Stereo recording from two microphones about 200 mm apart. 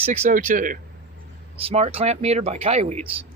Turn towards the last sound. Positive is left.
turn(degrees=-35)  # may be behind; listen again after turning